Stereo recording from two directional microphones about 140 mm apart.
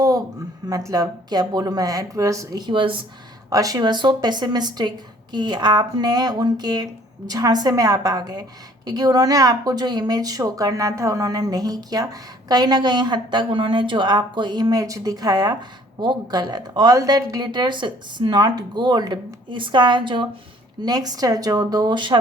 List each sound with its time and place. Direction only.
0.9 s a woman's voice: 25° right (ahead or behind)
3.5 s a woman's voice: 25° right (ahead or behind)